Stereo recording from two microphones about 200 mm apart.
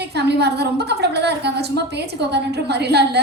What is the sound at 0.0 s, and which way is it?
A woman's voice, 55° right (ahead or behind).